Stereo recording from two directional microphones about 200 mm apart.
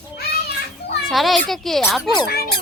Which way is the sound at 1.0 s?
Centre (ahead or behind).